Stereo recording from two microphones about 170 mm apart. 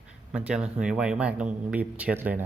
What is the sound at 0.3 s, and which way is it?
Speech, 5° right (ahead or behind).